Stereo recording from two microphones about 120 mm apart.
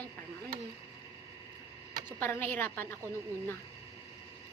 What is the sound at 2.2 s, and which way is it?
Speech, 15° left (ahead or behind).